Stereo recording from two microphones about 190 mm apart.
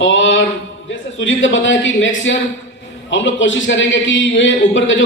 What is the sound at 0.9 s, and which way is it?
A man's voice, 80° left.